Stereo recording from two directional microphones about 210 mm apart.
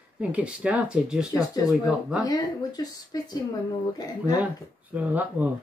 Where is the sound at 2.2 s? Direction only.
20° left (ahead or behind).